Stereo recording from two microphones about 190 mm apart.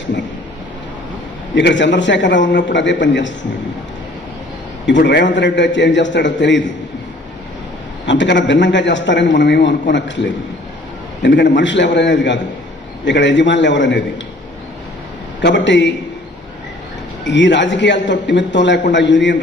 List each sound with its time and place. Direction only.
1.5 s a man's voice: 70° left (ahead or behind)
4.9 s a man's voice: 70° left (ahead or behind)
8.0 s a man's voice: 70° left (ahead or behind)
11.2 s a man's voice: 70° left (ahead or behind)
15.4 s a man's voice: 65° left (ahead or behind)
17.2 s a man's voice: 70° left (ahead or behind)